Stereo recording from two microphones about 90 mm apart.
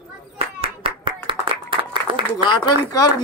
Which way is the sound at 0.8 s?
70° right (ahead or behind).